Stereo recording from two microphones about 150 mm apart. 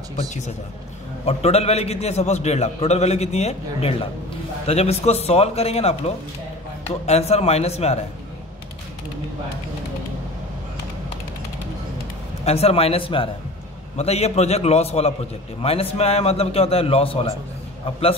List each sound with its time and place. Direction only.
0.1 s a man's voice: 50° left (ahead or behind)
12.4 s a man's voice: 45° left (ahead or behind)